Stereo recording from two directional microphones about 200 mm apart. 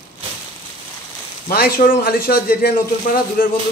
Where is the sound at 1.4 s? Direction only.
45° left (ahead or behind).